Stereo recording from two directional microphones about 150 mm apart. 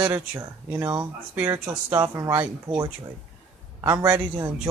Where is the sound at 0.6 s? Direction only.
10° right (ahead or behind).